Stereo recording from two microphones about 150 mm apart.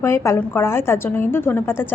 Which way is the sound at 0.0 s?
20° left (ahead or behind).